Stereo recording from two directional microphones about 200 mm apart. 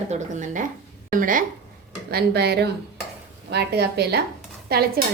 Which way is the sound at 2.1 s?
55° right (ahead or behind).